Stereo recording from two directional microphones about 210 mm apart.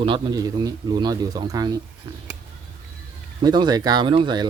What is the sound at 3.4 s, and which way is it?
A man's voice, 20° right (ahead or behind).